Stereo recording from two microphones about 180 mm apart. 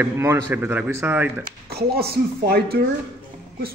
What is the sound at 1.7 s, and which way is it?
A woman's voice, 60° right (ahead or behind).